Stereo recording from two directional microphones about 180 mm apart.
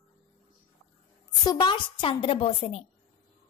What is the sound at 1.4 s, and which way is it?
A woman's voice, 25° left (ahead or behind).